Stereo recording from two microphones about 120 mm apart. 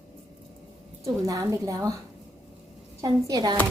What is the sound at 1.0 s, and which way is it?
Speech, 25° right (ahead or behind).